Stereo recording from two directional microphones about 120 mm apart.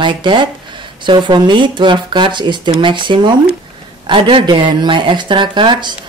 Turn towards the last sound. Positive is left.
turn(degrees=-40)  # may be behind; listen again after turning